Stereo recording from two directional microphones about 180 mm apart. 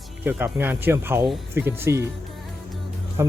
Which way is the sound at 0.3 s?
10° right (ahead or behind).